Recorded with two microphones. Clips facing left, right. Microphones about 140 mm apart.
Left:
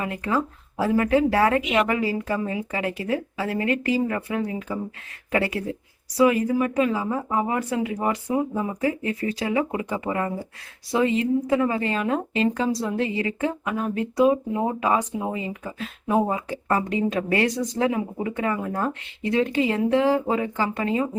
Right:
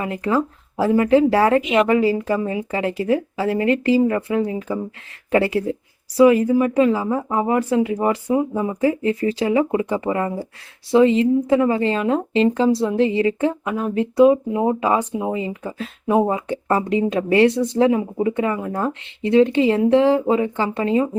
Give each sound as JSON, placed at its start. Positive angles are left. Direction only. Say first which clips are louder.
{"t": 0.0, "sound": "a woman's voice", "louder": "right 4 dB", "side_deg": -30}